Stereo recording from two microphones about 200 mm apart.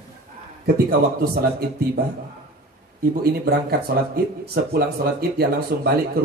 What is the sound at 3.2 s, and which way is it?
Speech, 50° right (ahead or behind).